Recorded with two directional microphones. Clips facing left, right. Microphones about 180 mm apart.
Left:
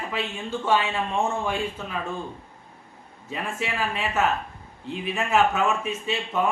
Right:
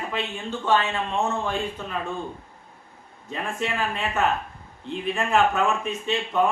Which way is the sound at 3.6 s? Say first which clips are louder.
Right 1 dB; 5° left (ahead or behind).